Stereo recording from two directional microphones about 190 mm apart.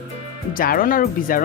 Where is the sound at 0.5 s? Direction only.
50° left (ahead or behind).